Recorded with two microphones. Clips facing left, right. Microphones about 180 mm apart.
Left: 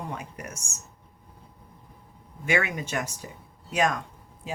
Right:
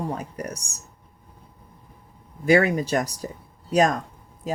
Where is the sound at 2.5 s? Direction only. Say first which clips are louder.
Right 9 dB; 35° right (ahead or behind).